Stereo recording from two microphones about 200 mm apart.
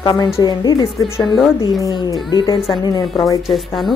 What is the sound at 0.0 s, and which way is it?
A woman's voice, 20° left (ahead or behind).